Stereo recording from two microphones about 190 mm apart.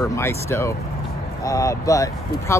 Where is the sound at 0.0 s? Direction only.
15° left (ahead or behind).